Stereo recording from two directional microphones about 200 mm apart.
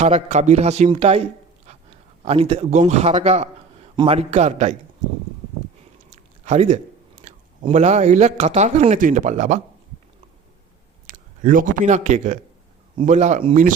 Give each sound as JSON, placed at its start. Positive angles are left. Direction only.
{"t": 0.0, "sound": "a man's voice", "side_deg": -35}
{"t": 6.4, "sound": "speech", "side_deg": -35}
{"t": 7.2, "sound": "chewing", "side_deg": -35}
{"t": 7.7, "sound": "a man's voice", "side_deg": -35}
{"t": 11.0, "sound": "a man's voice", "side_deg": -40}